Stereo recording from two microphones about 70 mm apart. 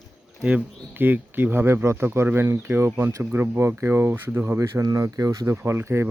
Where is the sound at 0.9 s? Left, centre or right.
Right.